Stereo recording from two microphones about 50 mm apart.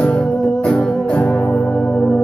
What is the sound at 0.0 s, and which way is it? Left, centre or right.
Music, left.